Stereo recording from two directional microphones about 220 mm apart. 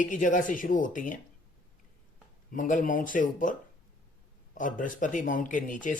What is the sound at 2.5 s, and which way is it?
Speech, 35° left (ahead or behind).